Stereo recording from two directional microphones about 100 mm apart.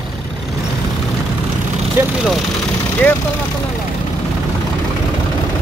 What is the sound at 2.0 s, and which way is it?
Speech, 25° right (ahead or behind).